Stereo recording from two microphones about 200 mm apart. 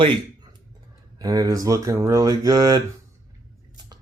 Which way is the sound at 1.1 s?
20° right (ahead or behind).